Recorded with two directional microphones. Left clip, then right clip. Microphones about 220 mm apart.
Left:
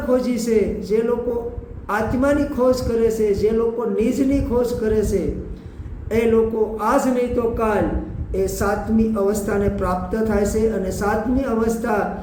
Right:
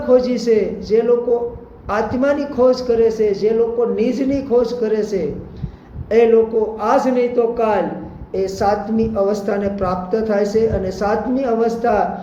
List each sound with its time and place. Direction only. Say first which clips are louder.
0.1 s speech: right 5 dB; 15° left (ahead or behind)